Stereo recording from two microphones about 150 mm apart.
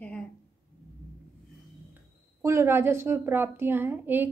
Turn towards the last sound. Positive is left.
turn(degrees=-15)  # may be behind; listen again after turning